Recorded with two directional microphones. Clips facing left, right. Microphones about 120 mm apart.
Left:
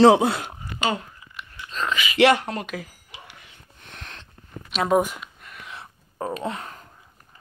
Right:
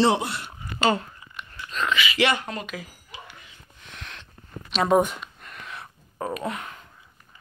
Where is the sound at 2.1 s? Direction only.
65° left (ahead or behind).